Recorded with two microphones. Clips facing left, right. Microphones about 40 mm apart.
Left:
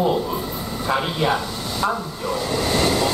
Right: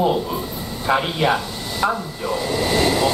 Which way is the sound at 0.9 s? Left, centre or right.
Centre.